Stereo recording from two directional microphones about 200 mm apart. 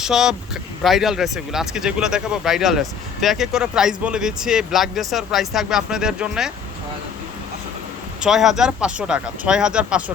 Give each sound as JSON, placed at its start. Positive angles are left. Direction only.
{"t": 0.0, "sound": "speech", "side_deg": -5}
{"t": 8.2, "sound": "speech", "side_deg": 0}